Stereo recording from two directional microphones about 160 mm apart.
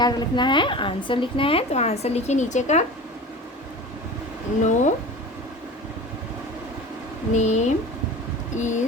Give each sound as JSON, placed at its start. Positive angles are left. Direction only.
{"t": 0.0, "sound": "a woman's voice", "side_deg": 30}
{"t": 4.6, "sound": "speech", "side_deg": 50}
{"t": 7.3, "sound": "speech", "side_deg": 45}